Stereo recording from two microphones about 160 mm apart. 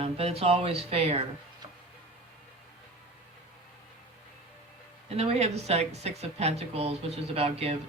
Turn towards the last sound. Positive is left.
turn(degrees=-40)  # may be behind; listen again after turning